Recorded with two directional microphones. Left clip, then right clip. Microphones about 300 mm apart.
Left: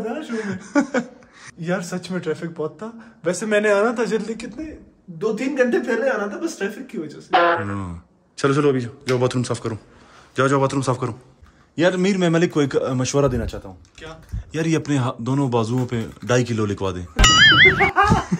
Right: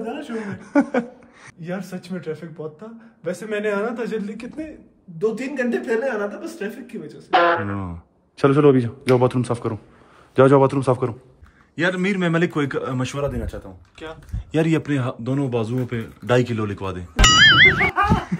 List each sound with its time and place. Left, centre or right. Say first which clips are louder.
0.3 s speech: even; centre
1.6 s a man's voice: left 6 dB; left
5.2 s speech: left 3 dB; centre
14.5 s speech: right 1 dB; centre
18.3 s a sound: left 3 dB; centre